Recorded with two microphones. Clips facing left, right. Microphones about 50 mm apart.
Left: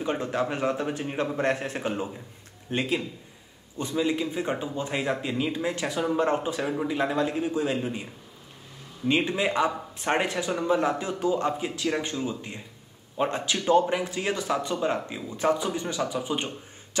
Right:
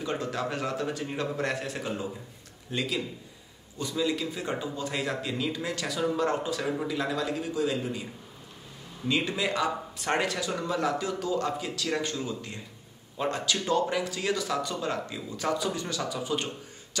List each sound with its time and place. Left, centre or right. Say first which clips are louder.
0.0 s a man's voice: left 4 dB; left